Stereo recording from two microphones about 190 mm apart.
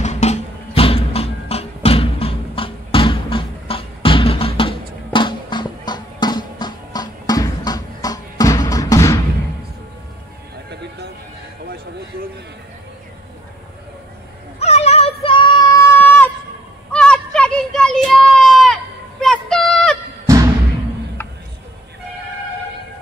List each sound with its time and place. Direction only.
0.0 s music: 35° left (ahead or behind); by 9.2 s 15° left (ahead or behind)
14.6 s child singing: 35° left (ahead or behind)
15.8 s a sound: 10° left (ahead or behind)